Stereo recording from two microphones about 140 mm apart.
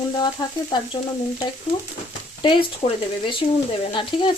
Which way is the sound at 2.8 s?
50° left (ahead or behind).